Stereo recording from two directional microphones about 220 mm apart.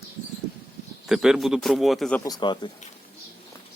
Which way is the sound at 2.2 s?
20° left (ahead or behind).